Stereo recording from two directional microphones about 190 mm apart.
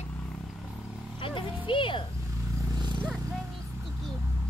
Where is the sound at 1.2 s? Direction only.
25° left (ahead or behind).